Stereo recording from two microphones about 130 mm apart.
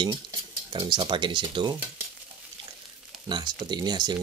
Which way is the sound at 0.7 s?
35° right (ahead or behind).